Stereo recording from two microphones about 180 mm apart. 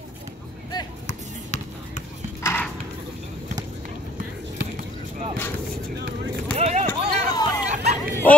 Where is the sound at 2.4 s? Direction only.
10° left (ahead or behind).